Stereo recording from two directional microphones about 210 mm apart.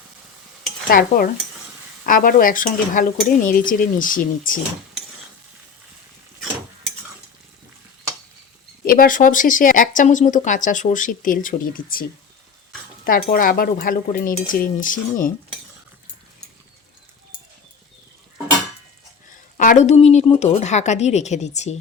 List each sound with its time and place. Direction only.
0.9 s stir: 45° left (ahead or behind)
2.0 s speech: 40° left (ahead or behind)
8.8 s speech: 45° left (ahead or behind)
13.3 s speech: 40° left (ahead or behind)
19.5 s speech: 35° left (ahead or behind)